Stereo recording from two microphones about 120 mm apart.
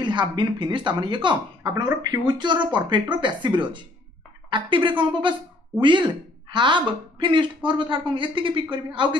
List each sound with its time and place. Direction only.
0.0 s a woman's voice: 40° right (ahead or behind)